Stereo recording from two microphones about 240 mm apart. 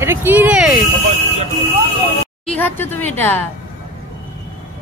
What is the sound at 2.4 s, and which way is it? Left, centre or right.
A woman's voice, centre.